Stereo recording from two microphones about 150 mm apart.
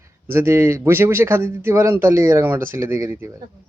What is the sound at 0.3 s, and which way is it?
Speech, 15° right (ahead or behind).